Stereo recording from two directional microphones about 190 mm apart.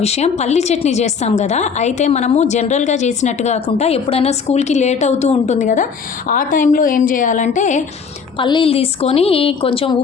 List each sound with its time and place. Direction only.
0.0 s a woman's voice: 35° left (ahead or behind)
8.4 s a woman's voice: 25° left (ahead or behind)